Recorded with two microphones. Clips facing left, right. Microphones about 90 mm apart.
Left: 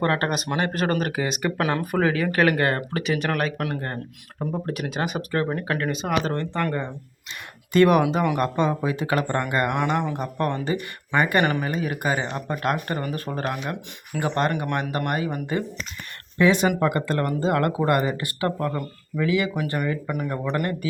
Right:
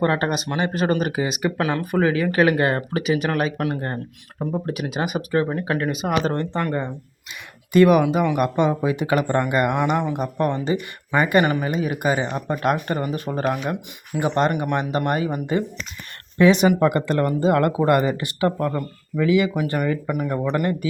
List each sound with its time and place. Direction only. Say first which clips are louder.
0.0 s speech: right 2 dB; 5° right (ahead or behind)
4.5 s speech: right 3 dB; 5° right (ahead or behind)
6.2 s speech: right 2 dB; 25° right (ahead or behind)
7.7 s speech: right 3 dB; 5° right (ahead or behind); by 19.5 s 25° right (ahead or behind)
20.1 s speech: right 4 dB; 5° right (ahead or behind)